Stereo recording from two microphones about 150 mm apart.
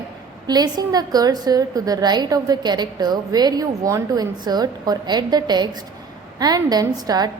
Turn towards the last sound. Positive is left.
turn(degrees=-25)  # may be behind; listen again after turning